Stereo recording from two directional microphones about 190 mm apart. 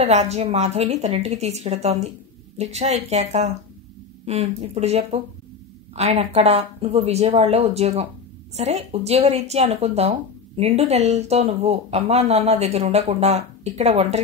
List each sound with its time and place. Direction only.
0.0 s speech: 35° right (ahead or behind)